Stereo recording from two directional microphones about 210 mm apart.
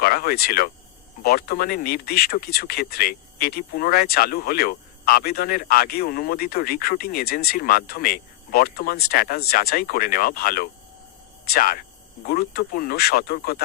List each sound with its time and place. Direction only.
0.0 s speech: 45° left (ahead or behind)